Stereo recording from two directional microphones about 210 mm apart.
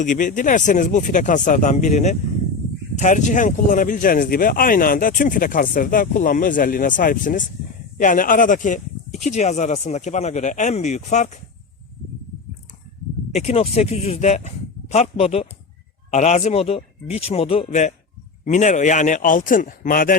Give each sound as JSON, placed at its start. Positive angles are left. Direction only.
{"t": 0.0, "sound": "speech", "side_deg": 35}
{"t": 13.3, "sound": "speech", "side_deg": 30}